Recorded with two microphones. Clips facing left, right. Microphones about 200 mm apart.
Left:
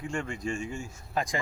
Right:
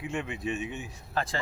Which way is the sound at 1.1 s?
15° left (ahead or behind).